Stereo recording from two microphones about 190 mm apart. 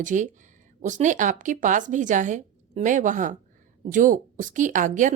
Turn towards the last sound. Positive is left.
turn(degrees=-40)  # may be behind; listen again after turning